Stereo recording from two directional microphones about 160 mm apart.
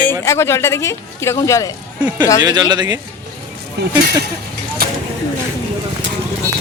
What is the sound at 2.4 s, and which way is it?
Speech, 25° right (ahead or behind).